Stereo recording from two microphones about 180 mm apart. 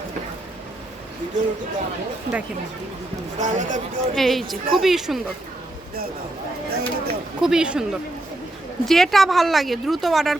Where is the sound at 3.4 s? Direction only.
45° right (ahead or behind).